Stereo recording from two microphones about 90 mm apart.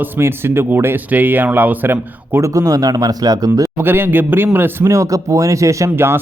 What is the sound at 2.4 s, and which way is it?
Speech, 40° right (ahead or behind).